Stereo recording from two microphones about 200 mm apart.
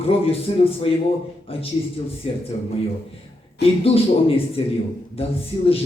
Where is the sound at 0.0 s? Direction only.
30° left (ahead or behind).